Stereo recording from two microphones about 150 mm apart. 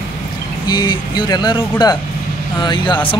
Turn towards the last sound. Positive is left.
turn(degrees=30)  # may be behind; listen again after turning